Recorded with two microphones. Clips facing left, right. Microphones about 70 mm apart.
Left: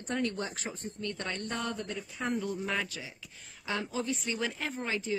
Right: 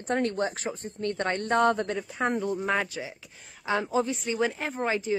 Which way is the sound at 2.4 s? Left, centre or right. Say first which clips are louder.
Right 6 dB; right.